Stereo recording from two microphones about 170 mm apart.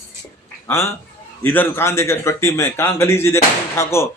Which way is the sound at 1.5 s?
15° left (ahead or behind).